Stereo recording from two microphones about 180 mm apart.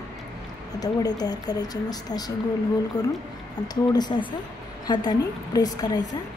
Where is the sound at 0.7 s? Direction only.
20° left (ahead or behind).